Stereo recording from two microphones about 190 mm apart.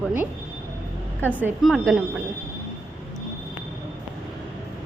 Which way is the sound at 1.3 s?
10° right (ahead or behind).